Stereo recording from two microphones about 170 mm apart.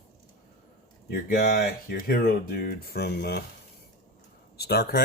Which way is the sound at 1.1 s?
60° left (ahead or behind).